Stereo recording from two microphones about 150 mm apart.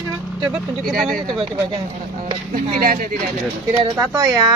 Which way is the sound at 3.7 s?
20° right (ahead or behind).